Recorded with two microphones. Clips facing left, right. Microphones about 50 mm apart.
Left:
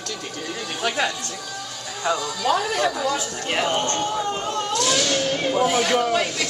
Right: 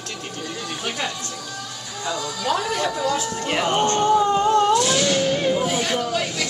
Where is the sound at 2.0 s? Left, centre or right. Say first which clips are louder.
Left 3 dB; centre.